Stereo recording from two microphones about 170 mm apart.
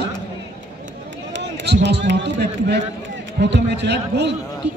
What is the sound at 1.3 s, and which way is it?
A man's voice, 90° right.